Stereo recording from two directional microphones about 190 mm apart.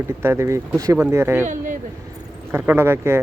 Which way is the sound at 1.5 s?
45° right (ahead or behind).